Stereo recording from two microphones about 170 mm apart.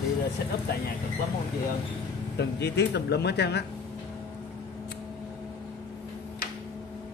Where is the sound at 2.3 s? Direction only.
80° left.